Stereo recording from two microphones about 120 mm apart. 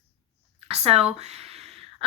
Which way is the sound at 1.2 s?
65° right (ahead or behind).